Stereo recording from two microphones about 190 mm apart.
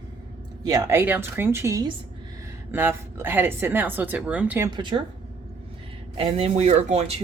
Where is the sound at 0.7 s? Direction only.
15° right (ahead or behind).